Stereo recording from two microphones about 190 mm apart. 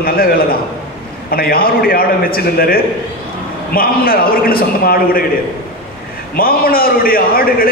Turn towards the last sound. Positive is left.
turn(degrees=50)  # may be behind; listen again after turning